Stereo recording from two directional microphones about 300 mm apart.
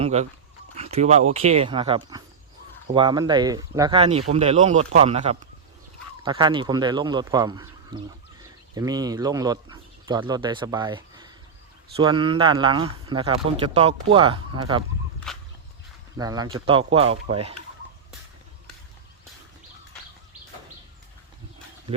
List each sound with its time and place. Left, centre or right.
0.0 s speech: right
15.3 s a sound: centre
16.1 s speech: centre